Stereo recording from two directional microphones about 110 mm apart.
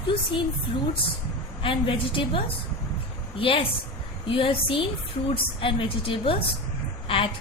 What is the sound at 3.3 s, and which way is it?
A woman's voice, 55° left (ahead or behind).